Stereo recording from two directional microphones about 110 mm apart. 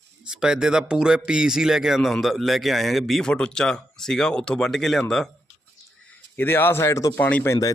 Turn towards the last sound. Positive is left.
turn(degrees=35)  # may be behind; listen again after turning